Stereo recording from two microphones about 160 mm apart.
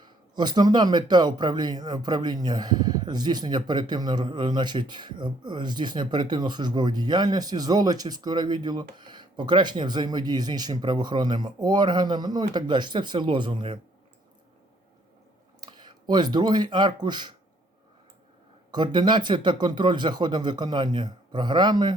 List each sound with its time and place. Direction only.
0.0 s speech: 30° right (ahead or behind)
15.6 s speech: 25° right (ahead or behind)
18.7 s speech: 30° right (ahead or behind)